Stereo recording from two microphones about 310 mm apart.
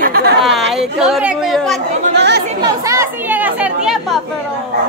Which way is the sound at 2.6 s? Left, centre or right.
Centre.